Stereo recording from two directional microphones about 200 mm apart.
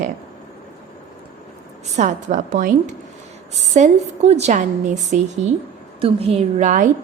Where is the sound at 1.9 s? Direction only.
40° right (ahead or behind).